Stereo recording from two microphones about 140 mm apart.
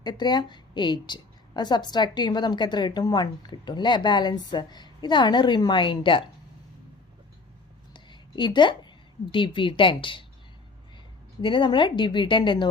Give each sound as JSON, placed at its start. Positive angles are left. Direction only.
{"t": 0.0, "sound": "a woman's voice", "side_deg": 30}
{"t": 7.9, "sound": "a sound", "side_deg": 35}
{"t": 9.3, "sound": "a woman's voice", "side_deg": 35}
{"t": 11.3, "sound": "a woman's voice", "side_deg": 35}